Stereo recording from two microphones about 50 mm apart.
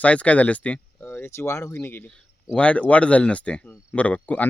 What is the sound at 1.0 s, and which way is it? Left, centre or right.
Speech, left.